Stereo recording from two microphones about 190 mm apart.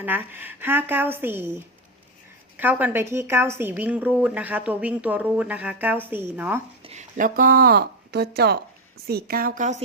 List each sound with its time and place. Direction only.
0.0 s a woman's voice: 10° right (ahead or behind)
6.8 s speech: 40° right (ahead or behind)